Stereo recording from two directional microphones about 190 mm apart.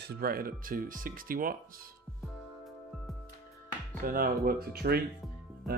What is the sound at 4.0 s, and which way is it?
Speech, 50° right (ahead or behind).